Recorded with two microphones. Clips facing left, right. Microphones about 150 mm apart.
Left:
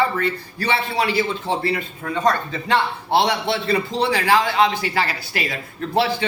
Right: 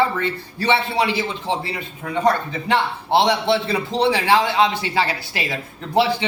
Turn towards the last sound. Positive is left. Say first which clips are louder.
# right 2 dB
turn(degrees=-15)  # may be behind; listen again after turning